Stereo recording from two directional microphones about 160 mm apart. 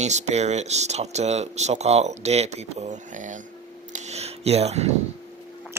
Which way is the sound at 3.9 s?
45° right (ahead or behind).